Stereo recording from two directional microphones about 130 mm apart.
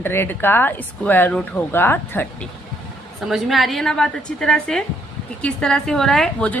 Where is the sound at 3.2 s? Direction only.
Centre (ahead or behind).